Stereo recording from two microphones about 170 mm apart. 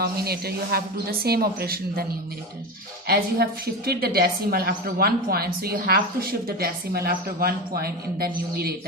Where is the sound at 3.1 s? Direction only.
65° right (ahead or behind).